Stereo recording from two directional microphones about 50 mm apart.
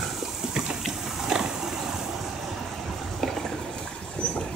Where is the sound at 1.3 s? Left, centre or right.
Centre.